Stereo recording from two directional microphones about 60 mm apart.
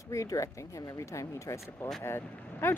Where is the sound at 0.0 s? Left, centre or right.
Left.